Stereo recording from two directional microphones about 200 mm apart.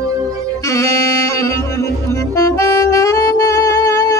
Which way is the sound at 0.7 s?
15° left (ahead or behind).